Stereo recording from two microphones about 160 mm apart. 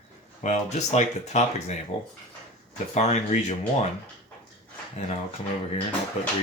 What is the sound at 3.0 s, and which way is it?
Speech, 45° left (ahead or behind).